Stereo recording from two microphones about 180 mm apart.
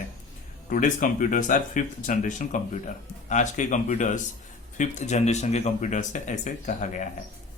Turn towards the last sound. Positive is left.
turn(degrees=45)  # may be behind; listen again after turning